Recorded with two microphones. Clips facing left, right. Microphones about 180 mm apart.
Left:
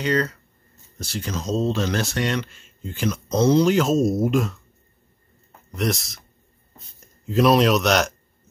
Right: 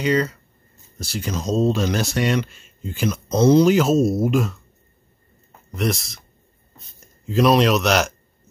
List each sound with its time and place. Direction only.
0.0 s speech: 10° right (ahead or behind)
5.7 s speech: centre (ahead or behind)
7.2 s speech: centre (ahead or behind)